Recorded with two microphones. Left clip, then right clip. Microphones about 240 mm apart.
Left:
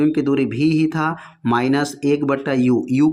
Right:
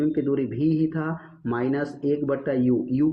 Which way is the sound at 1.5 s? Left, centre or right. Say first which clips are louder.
Left 8 dB; left.